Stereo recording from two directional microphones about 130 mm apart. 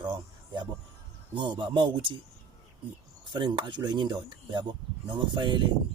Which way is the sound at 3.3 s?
35° right (ahead or behind).